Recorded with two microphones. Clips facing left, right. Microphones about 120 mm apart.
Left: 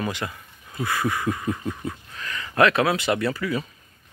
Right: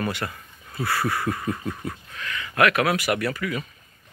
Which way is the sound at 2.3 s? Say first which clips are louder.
Left 2 dB; 30° left (ahead or behind).